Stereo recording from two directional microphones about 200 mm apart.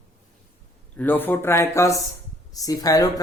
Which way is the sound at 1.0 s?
10° left (ahead or behind).